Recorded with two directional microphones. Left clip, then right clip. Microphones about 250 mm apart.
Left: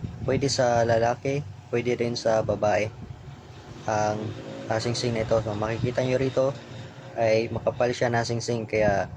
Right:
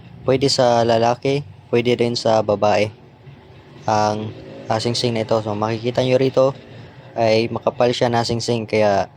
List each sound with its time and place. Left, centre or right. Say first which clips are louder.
0.3 s speech: right 8 dB; right